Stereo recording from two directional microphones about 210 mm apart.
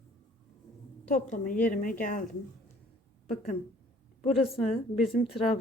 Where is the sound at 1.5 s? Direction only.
40° left (ahead or behind).